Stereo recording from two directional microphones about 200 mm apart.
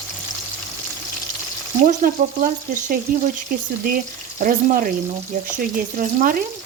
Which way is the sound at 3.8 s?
45° right (ahead or behind).